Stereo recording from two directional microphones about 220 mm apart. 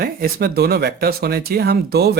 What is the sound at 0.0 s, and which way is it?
Speech, 45° right (ahead or behind).